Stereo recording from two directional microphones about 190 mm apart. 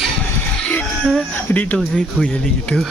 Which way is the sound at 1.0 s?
5° left (ahead or behind).